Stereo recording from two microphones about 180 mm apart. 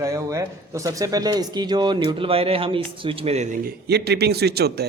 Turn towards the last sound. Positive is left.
turn(degrees=-65)  # may be behind; listen again after turning